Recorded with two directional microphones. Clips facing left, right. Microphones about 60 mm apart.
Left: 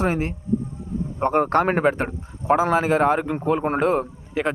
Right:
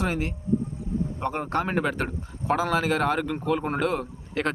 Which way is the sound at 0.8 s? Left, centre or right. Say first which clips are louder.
Even; right.